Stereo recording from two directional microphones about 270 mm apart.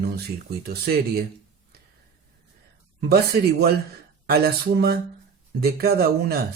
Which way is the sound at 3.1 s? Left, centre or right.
Right.